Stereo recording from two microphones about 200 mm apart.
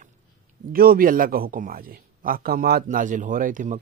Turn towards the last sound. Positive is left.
turn(degrees=-40)  # may be behind; listen again after turning